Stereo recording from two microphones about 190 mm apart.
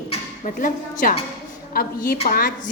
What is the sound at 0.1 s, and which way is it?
A woman's voice, 45° left (ahead or behind).